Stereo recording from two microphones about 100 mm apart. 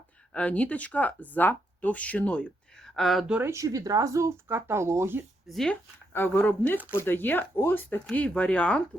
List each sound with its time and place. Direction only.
0.3 s speech: 15° left (ahead or behind)
3.3 s speech: 25° right (ahead or behind)
5.5 s speech: 5° left (ahead or behind)
6.1 s speech: 20° left (ahead or behind)